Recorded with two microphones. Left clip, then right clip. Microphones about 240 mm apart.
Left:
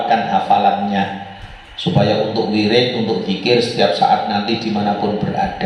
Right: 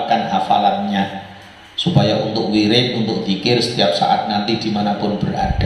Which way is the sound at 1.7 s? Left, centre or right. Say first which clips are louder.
Left 1 dB; right.